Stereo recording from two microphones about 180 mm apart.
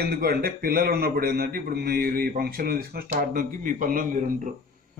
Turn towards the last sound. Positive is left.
turn(degrees=-50)  # may be behind; listen again after turning